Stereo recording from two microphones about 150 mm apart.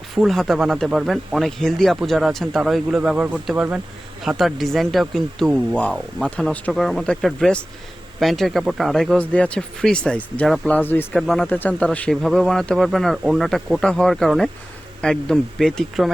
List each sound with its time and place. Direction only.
0.1 s speech: centre (ahead or behind)
10.8 s a man's voice: 10° left (ahead or behind)
11.2 s speech: centre (ahead or behind)
11.4 s a man's voice: 10° left (ahead or behind)